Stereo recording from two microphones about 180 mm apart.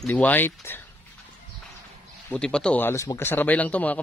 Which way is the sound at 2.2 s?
5° left (ahead or behind).